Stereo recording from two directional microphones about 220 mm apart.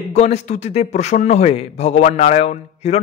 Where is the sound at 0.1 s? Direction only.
30° left (ahead or behind).